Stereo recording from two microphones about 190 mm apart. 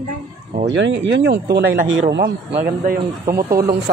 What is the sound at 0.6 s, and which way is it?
Speech, 70° right (ahead or behind).